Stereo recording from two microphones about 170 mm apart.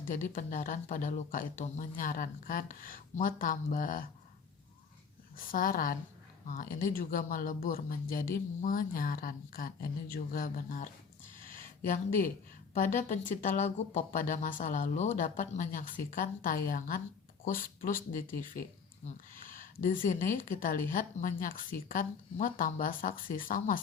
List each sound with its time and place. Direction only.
0.3 s speech: 50° left (ahead or behind)
5.5 s speech: 55° left (ahead or behind)
11.4 s a sound: 55° left (ahead or behind)
12.7 s speech: 50° left (ahead or behind)
19.4 s a sound: 55° left (ahead or behind)
20.3 s speech: 55° left (ahead or behind)